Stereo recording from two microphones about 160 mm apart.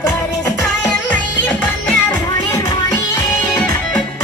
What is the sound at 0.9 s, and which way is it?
Music, 10° left (ahead or behind).